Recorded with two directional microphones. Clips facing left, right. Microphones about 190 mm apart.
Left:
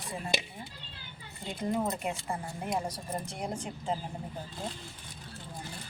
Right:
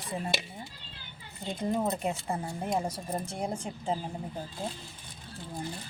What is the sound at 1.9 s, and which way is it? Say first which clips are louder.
Speech: right 3 dB; 25° right (ahead or behind).